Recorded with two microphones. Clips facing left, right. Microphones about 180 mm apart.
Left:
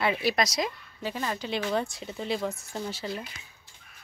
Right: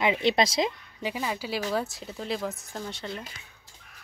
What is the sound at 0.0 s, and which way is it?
Speech, 20° right (ahead or behind).